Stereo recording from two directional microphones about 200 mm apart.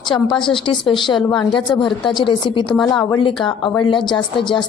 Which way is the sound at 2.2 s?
25° left (ahead or behind).